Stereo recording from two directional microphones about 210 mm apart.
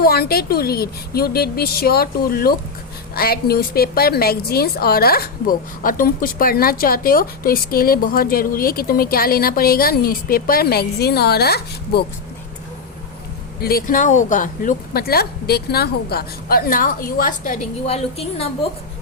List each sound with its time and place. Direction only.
0.0 s a woman's voice: 50° left (ahead or behind)
13.6 s a woman's voice: 45° left (ahead or behind)
17.8 s a woman's voice: 30° left (ahead or behind)